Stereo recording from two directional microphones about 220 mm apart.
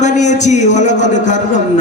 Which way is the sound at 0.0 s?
35° left (ahead or behind).